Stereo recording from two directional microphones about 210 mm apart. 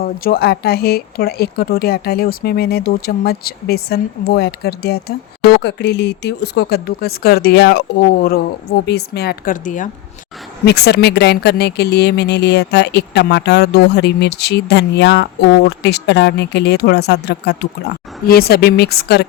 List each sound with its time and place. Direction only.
0.0 s speech: 45° left (ahead or behind)
10.7 s speech: 50° left (ahead or behind)